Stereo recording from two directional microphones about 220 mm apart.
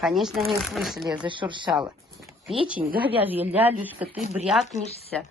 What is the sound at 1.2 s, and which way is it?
Speech, 20° right (ahead or behind).